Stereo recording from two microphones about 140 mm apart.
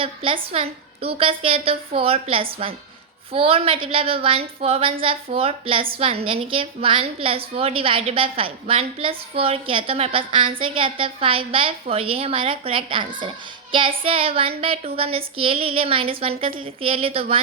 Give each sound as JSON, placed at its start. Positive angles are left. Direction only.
{"t": 0.0, "sound": "a woman's voice", "side_deg": -40}